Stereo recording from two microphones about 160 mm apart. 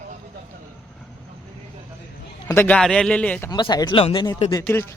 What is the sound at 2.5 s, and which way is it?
Speech, 15° left (ahead or behind).